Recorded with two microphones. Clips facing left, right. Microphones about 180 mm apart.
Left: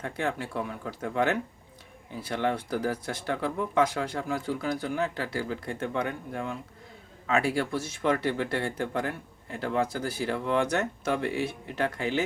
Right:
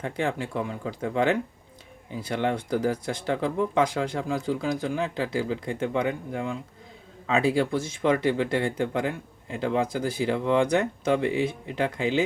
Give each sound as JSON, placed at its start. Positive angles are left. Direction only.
{"t": 0.0, "sound": "speech", "side_deg": -15}